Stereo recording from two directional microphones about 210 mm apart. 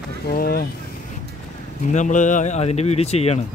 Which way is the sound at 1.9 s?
35° left (ahead or behind).